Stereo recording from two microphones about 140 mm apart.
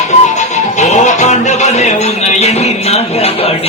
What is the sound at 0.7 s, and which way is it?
A man's voice, 55° left (ahead or behind).